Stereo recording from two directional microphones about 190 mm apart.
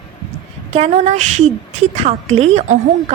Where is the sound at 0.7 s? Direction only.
35° right (ahead or behind).